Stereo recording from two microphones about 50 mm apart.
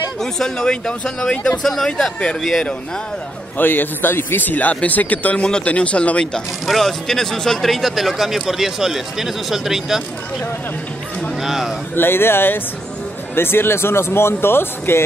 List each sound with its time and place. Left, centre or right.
0.2 s speech: centre
1.6 s speech: centre
3.5 s speech: left
6.6 s speech: centre
11.4 s speech: centre
11.9 s speech: left